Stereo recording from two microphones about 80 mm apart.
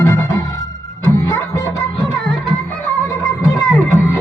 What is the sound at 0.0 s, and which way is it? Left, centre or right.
Music, left.